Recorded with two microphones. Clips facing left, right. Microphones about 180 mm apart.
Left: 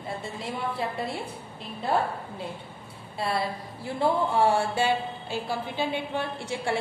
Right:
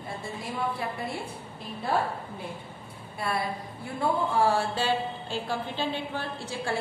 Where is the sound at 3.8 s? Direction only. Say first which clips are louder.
Left 3 dB; 30° left (ahead or behind).